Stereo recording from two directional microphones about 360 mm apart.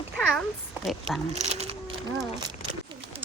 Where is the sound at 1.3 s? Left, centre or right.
Centre.